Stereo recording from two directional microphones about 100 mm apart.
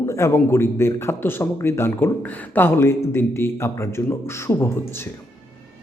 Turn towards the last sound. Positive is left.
turn(degrees=35)  # may be behind; listen again after turning